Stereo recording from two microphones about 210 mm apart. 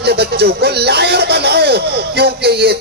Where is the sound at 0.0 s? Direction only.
50° right (ahead or behind).